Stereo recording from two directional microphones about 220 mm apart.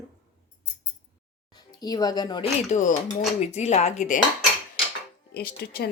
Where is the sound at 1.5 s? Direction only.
20° left (ahead or behind).